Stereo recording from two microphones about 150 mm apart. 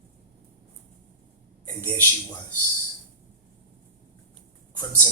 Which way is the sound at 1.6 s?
15° left (ahead or behind).